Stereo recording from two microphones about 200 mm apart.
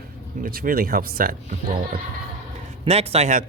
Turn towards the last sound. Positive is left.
turn(degrees=-35)  # may be behind; listen again after turning